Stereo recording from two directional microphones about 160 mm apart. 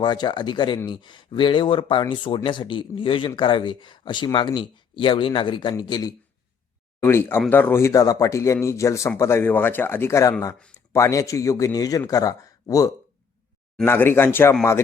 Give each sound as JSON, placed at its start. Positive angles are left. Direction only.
{"t": 0.0, "sound": "a man's voice", "side_deg": 30}
{"t": 7.0, "sound": "a man's voice", "side_deg": 15}